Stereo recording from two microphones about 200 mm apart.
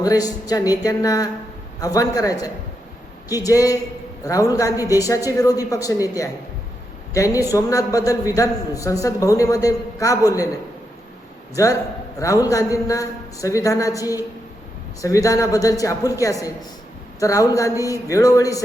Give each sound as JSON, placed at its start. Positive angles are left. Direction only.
{"t": 0.0, "sound": "a man's voice", "side_deg": 20}
{"t": 11.5, "sound": "a man's voice", "side_deg": 15}